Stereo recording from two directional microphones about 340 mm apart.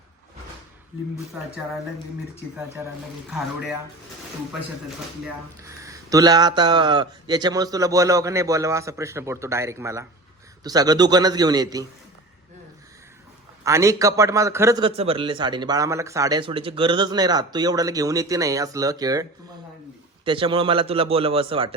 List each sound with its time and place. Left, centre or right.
3.2 s speech: centre
5.2 s a man's voice: centre
13.7 s a man's voice: centre